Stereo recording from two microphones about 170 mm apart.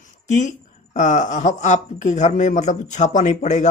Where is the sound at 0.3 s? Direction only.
45° left (ahead or behind).